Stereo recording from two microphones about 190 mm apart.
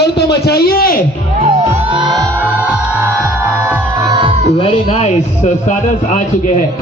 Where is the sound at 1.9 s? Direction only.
20° right (ahead or behind).